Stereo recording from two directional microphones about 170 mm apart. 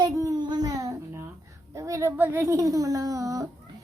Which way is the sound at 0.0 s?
20° right (ahead or behind).